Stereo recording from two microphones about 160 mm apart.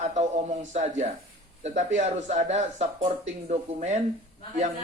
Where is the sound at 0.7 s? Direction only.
45° right (ahead or behind).